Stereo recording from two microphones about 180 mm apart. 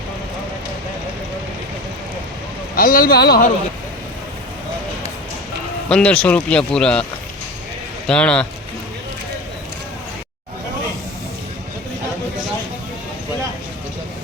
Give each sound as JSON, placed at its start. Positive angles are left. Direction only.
{"t": 2.7, "sound": "speech", "side_deg": 55}
{"t": 5.9, "sound": "speech", "side_deg": 5}
{"t": 8.0, "sound": "speech", "side_deg": 5}